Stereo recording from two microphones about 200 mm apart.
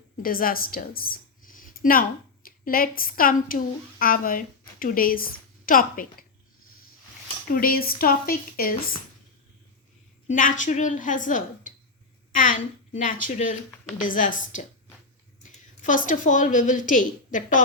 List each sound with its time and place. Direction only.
0.2 s speech: 45° left (ahead or behind)
7.4 s a woman's voice: 45° left (ahead or behind)
10.2 s a woman's voice: 40° left (ahead or behind)